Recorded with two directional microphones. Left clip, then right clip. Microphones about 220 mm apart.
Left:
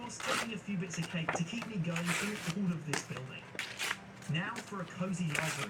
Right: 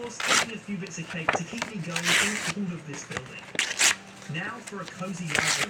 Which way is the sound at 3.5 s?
25° right (ahead or behind).